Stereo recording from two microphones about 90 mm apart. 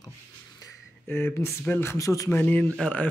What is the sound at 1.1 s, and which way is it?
Speech, 25° left (ahead or behind).